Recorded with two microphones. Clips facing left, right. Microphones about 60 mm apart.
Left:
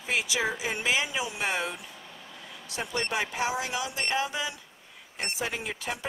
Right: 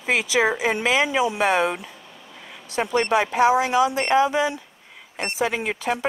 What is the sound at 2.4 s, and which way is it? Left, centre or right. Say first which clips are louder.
Vehicle: right 6 dB; right.